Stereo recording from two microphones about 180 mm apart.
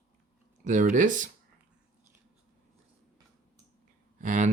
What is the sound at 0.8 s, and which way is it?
Speech, 45° right (ahead or behind).